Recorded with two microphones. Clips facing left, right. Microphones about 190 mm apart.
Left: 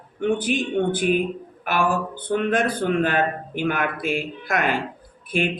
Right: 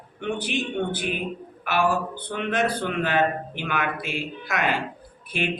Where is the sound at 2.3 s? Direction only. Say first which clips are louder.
Left 4 dB; 45° left (ahead or behind).